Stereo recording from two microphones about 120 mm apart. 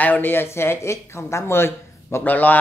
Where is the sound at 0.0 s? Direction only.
15° left (ahead or behind).